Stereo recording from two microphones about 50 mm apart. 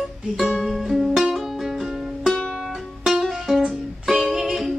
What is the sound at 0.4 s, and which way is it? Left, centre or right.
Music, centre.